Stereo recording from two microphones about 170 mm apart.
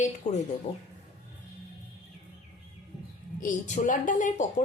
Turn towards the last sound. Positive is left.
turn(degrees=50)  # may be behind; listen again after turning